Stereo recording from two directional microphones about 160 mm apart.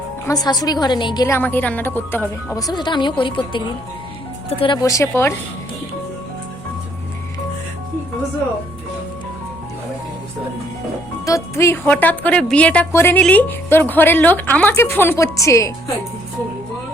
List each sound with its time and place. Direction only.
0.3 s a woman's voice: 25° left (ahead or behind)
1.4 s a woman's voice: 10° left (ahead or behind); by 3.6 s 30° left (ahead or behind)
4.6 s a woman's voice: 25° left (ahead or behind)
11.3 s a woman's voice: 20° left (ahead or behind)